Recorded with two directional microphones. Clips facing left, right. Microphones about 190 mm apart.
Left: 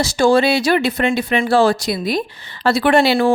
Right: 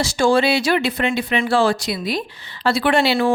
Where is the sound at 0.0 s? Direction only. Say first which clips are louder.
Left 3 dB; 40° left (ahead or behind).